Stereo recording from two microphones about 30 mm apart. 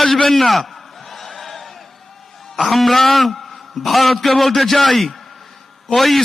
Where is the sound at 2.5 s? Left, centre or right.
Centre.